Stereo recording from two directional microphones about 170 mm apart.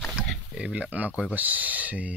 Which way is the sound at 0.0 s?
Centre (ahead or behind).